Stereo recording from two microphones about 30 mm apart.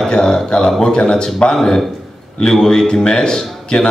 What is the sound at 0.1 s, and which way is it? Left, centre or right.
A man's voice, left.